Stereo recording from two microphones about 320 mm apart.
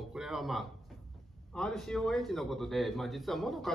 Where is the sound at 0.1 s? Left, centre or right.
Centre.